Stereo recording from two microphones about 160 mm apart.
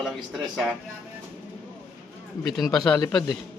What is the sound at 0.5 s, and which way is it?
Speech, centre (ahead or behind).